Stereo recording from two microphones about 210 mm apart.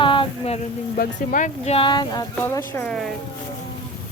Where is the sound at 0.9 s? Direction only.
40° left (ahead or behind); by 3.1 s 5° left (ahead or behind).